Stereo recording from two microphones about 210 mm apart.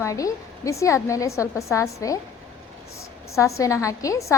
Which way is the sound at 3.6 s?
15° left (ahead or behind).